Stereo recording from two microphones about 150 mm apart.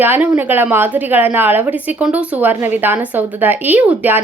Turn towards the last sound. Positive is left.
turn(degrees=-10)  # may be behind; listen again after turning